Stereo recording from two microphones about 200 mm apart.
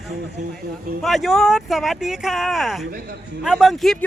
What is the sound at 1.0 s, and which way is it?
Speech, centre (ahead or behind).